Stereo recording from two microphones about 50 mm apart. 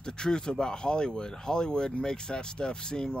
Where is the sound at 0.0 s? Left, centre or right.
Centre.